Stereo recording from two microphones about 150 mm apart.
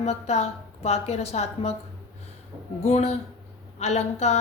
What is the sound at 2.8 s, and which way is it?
A woman's voice, 45° left (ahead or behind).